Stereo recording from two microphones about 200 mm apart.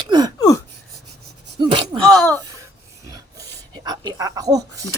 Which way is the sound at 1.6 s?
25° right (ahead or behind).